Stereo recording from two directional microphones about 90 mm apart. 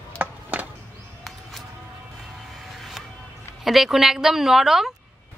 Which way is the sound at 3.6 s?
Centre (ahead or behind).